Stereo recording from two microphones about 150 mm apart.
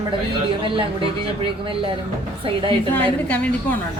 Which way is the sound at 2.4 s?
35° right (ahead or behind).